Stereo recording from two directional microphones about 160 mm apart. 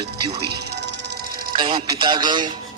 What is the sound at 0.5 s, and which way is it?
Music, 90° right.